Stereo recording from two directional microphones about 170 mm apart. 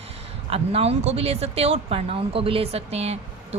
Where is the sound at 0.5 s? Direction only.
35° right (ahead or behind).